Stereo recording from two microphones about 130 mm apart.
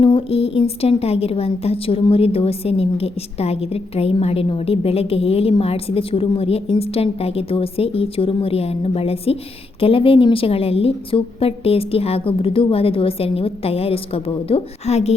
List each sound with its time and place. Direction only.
0.0 s a woman's voice: 40° left (ahead or behind)